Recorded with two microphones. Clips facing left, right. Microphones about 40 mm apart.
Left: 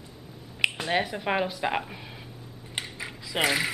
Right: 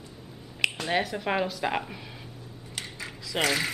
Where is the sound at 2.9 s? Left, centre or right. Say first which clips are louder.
Even; centre.